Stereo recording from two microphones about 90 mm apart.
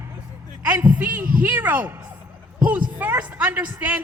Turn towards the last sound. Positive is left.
turn(degrees=-15)  # may be behind; listen again after turning